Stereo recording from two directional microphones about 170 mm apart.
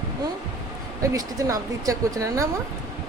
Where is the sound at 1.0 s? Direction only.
20° right (ahead or behind).